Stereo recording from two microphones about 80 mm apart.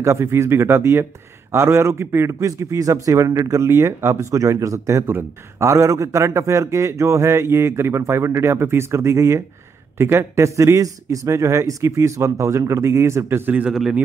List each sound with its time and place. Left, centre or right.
0.0 s a man's voice: right
13.5 s a man's voice: centre